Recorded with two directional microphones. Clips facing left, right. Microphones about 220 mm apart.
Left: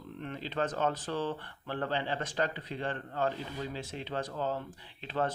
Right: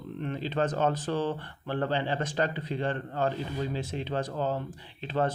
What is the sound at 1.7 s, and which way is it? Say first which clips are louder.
Speech: right 4 dB; 30° right (ahead or behind).